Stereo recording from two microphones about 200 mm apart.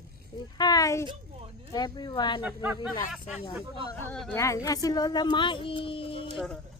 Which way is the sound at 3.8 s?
10° left (ahead or behind).